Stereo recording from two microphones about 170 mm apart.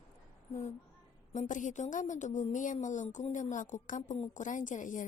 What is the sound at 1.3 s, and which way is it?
A woman's voice, 45° left (ahead or behind).